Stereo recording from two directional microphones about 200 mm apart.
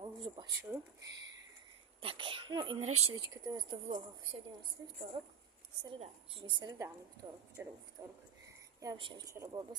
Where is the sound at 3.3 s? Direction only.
20° right (ahead or behind).